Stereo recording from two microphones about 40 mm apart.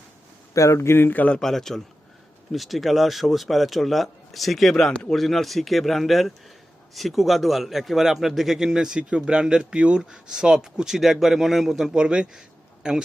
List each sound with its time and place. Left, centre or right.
0.8 s speech: left
1.4 s a man's voice: centre
2.5 s a man's voice: centre
4.9 s a man's voice: centre
5.1 s a man's voice: centre
11.9 s speech: right